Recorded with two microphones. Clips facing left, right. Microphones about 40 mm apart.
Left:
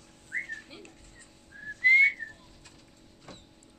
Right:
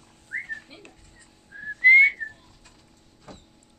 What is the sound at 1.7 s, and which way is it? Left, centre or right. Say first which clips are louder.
Whistling: right 6 dB; right.